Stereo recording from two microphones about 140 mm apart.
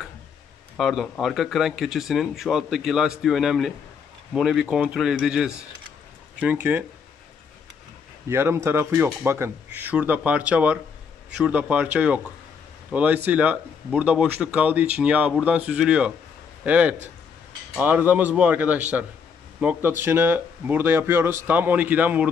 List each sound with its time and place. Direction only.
0.7 s speech: centre (ahead or behind)
8.3 s speech: 20° right (ahead or behind)